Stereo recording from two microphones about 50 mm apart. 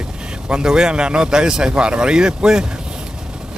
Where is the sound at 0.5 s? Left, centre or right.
Centre.